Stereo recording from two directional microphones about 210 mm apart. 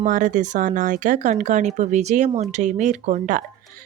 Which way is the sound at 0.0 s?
40° right (ahead or behind).